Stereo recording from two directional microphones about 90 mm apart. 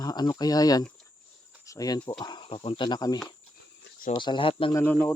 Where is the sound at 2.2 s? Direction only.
65° left (ahead or behind).